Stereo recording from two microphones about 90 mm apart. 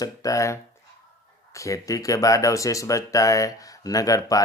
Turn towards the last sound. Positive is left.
turn(degrees=40)  # may be behind; listen again after turning